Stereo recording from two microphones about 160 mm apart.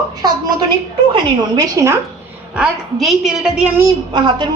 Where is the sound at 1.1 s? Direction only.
25° right (ahead or behind).